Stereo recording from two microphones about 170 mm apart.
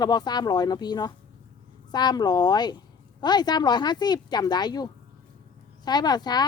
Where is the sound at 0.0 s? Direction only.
25° left (ahead or behind).